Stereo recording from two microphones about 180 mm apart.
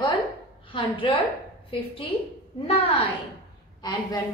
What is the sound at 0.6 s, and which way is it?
A woman's voice, 30° left (ahead or behind).